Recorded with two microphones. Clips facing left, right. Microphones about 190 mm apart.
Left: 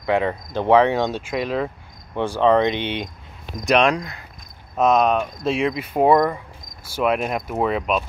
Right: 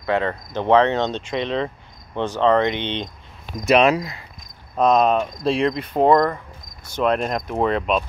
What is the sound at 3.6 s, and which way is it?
Speech, 5° right (ahead or behind).